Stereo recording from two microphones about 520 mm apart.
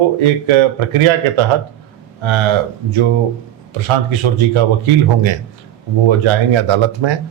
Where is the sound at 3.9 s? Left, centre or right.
Right.